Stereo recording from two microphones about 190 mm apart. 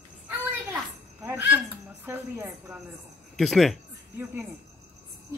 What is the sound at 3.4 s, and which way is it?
Speech, centre (ahead or behind).